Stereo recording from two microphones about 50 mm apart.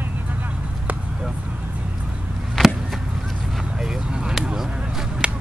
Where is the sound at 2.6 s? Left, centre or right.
Centre.